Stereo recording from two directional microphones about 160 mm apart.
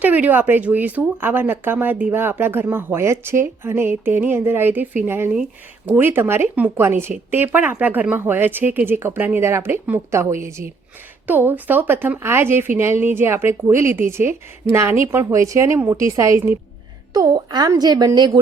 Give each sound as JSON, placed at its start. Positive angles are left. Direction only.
{"t": 0.0, "sound": "a woman's voice", "side_deg": -10}